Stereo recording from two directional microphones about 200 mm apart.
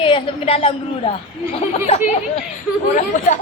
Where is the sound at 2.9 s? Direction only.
40° left (ahead or behind).